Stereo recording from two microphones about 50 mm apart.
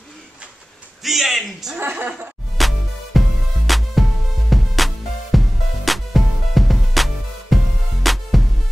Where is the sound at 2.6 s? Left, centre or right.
Centre.